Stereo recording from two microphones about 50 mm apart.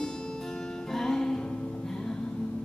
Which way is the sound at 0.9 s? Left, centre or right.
Centre.